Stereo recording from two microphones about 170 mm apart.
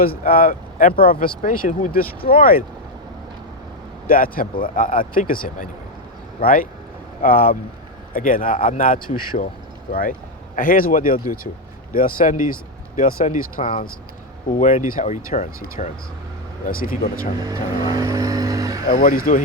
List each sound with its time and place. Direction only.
0.0 s speech: 60° left (ahead or behind)
4.0 s speech: 60° left (ahead or behind)
17.4 s vehicle: 20° right (ahead or behind)
18.9 s speech: 55° left (ahead or behind)